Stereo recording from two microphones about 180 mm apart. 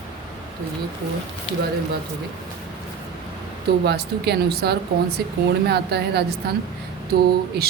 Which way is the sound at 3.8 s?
65° right (ahead or behind).